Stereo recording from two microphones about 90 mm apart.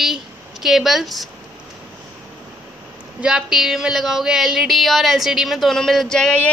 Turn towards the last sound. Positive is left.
turn(degrees=10)  # may be behind; listen again after turning